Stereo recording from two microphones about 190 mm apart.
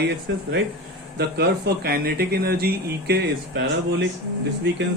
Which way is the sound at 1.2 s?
60° right (ahead or behind).